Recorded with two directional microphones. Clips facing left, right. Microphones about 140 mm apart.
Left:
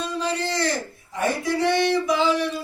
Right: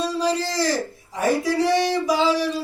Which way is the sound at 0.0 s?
35° right (ahead or behind).